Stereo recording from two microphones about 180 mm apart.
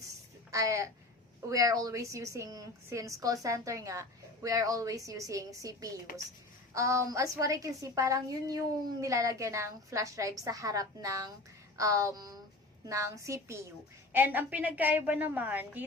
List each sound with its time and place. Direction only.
0.5 s a woman's voice: 15° right (ahead or behind)